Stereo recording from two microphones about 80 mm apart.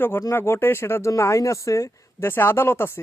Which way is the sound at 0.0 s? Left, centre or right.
Left.